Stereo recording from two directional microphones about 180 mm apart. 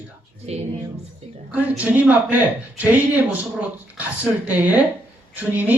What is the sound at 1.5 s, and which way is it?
Speech, 10° right (ahead or behind).